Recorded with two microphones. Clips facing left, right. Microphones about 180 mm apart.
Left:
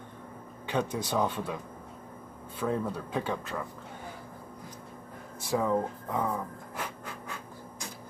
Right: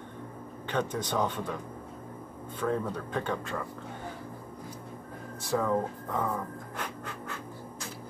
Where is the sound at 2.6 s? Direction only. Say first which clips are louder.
Even; 10° left (ahead or behind).